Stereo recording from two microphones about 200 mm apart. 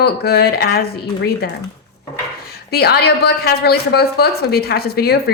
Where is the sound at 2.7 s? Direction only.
50° left (ahead or behind).